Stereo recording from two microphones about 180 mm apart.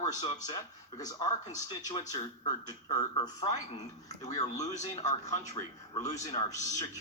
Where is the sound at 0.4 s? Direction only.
20° left (ahead or behind).